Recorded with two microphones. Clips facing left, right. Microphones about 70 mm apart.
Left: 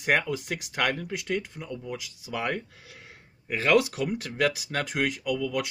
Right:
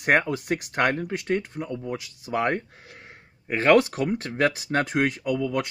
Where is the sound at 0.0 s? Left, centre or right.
Right.